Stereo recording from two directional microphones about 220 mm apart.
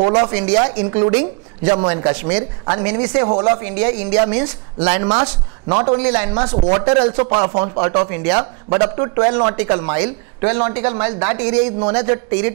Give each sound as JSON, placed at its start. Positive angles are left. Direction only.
{"t": 0.5, "sound": "speech", "side_deg": -25}
{"t": 3.6, "sound": "speech", "side_deg": -15}
{"t": 5.0, "sound": "speech", "side_deg": -25}